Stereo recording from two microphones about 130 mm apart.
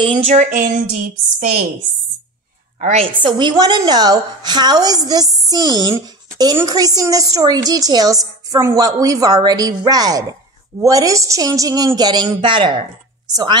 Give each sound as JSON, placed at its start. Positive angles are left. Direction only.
{"t": 0.3, "sound": "a woman's voice", "side_deg": -85}
{"t": 2.8, "sound": "a woman's voice", "side_deg": -60}
{"t": 3.2, "sound": "a woman's voice", "side_deg": -35}